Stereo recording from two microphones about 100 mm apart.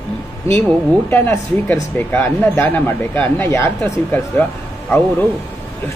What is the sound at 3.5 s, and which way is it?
Speech, 30° left (ahead or behind).